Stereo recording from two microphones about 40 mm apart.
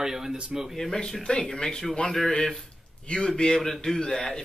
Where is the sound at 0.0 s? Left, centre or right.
Centre.